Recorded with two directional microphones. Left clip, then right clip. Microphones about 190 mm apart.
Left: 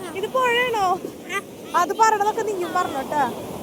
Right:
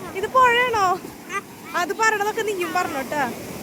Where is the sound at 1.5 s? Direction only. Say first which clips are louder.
Left 4 dB; 25° right (ahead or behind).